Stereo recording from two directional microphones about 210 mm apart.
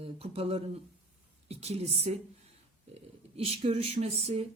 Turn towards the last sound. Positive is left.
turn(degrees=-30)  # may be behind; listen again after turning